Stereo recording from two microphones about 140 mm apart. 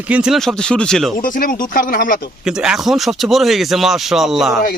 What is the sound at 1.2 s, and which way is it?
Speech, 75° left (ahead or behind).